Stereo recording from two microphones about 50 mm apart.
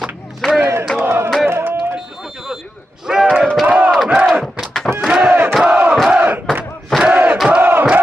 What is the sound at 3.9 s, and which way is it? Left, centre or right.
Battle cry, centre.